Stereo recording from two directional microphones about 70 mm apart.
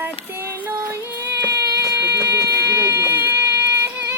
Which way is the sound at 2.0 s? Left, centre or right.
Right.